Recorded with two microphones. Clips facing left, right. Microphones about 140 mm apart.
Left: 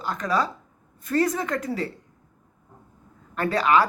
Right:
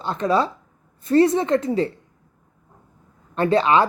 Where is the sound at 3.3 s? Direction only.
25° right (ahead or behind).